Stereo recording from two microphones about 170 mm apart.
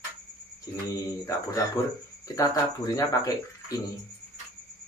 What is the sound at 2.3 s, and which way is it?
Speech, 20° left (ahead or behind).